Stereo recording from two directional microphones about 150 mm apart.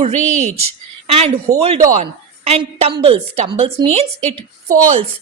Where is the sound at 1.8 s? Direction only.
60° right (ahead or behind).